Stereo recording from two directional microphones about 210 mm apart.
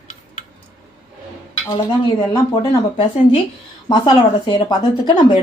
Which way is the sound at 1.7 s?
15° left (ahead or behind).